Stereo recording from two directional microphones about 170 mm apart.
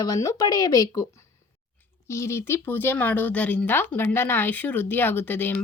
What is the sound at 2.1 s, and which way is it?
Speech, 15° left (ahead or behind).